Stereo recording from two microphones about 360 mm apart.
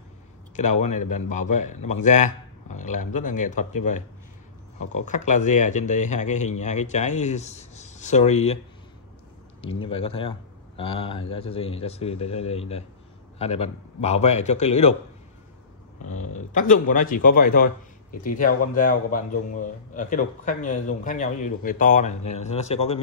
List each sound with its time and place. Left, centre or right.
0.6 s a man's voice: centre
5.0 s a man's voice: centre
9.6 s a man's voice: centre
16.1 s a man's voice: centre